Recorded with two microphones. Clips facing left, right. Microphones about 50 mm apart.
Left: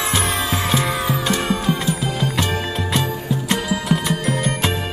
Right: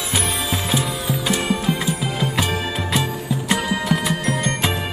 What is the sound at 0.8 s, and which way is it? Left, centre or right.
Music, left.